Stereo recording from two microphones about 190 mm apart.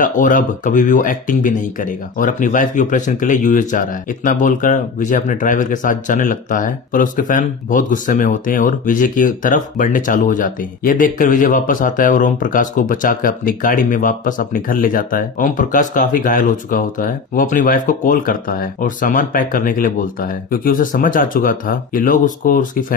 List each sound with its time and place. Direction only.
0.0 s speech: 45° left (ahead or behind)